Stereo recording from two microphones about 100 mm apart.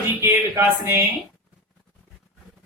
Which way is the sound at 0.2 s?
25° right (ahead or behind).